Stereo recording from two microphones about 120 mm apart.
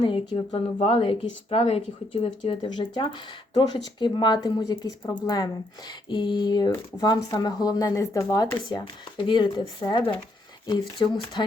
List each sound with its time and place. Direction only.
0.0 s speech: 45° left (ahead or behind)
2.6 s speech: 40° left (ahead or behind)